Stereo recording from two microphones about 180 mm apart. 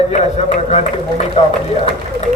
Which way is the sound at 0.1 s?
35° left (ahead or behind).